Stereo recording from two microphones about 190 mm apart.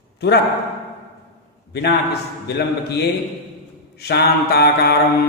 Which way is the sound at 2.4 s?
60° left (ahead or behind).